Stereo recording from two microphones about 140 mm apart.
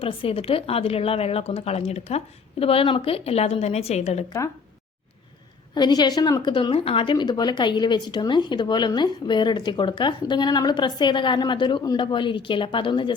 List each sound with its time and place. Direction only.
0.0 s a woman's voice: 40° left (ahead or behind)
5.7 s a woman's voice: 30° left (ahead or behind)